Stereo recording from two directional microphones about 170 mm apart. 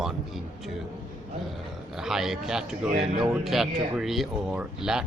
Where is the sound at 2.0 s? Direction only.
5° right (ahead or behind).